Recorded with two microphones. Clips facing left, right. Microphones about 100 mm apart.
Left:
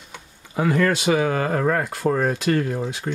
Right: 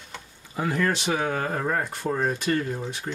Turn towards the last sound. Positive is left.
turn(degrees=75)  # may be behind; listen again after turning